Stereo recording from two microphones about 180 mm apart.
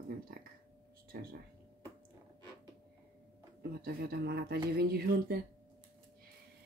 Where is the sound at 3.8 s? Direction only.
60° right (ahead or behind).